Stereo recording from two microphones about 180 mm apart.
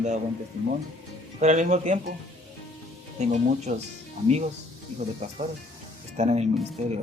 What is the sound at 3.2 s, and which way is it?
Speech, 40° right (ahead or behind).